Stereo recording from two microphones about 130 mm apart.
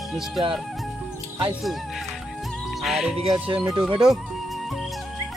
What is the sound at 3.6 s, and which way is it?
Speech, 25° right (ahead or behind).